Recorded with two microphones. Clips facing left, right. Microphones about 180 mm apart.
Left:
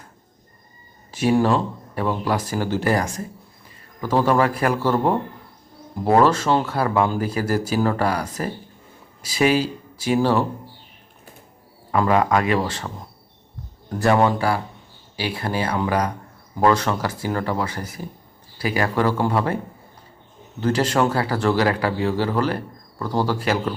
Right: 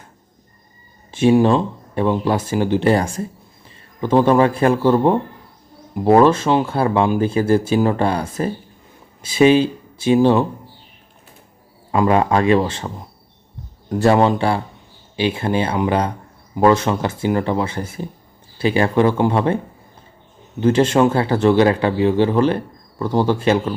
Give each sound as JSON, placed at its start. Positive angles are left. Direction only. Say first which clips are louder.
{"t": 1.1, "sound": "speech", "louder": "right 5 dB", "side_deg": -20}
{"t": 11.9, "sound": "speech", "louder": "right 3 dB", "side_deg": -20}
{"t": 13.9, "sound": "speech", "louder": "right 4 dB", "side_deg": -25}
{"t": 20.6, "sound": "speech", "louder": "right 5 dB", "side_deg": -20}